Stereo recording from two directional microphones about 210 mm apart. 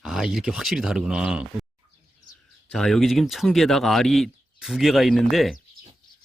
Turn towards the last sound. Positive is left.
turn(degrees=0)  # may be behind; listen again after turning